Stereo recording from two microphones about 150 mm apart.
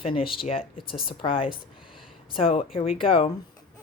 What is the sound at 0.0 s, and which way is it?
A woman's voice, 35° left (ahead or behind).